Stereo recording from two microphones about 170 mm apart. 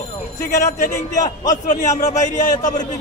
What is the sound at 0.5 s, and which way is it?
Speech, 45° left (ahead or behind).